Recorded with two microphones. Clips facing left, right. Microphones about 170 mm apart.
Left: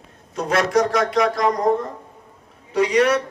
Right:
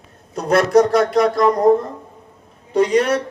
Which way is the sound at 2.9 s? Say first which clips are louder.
Right 1 dB; 35° right (ahead or behind).